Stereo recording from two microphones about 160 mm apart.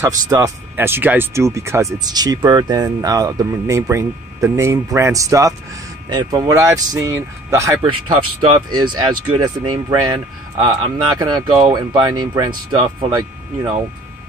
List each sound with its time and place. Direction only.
0.3 s speech: 15° right (ahead or behind)
7.8 s speech: 30° right (ahead or behind)